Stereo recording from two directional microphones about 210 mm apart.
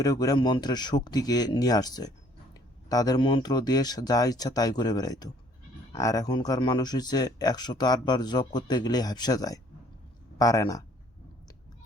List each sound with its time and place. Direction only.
0.0 s speech: 15° left (ahead or behind)